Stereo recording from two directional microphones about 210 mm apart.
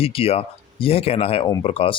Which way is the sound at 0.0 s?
25° left (ahead or behind).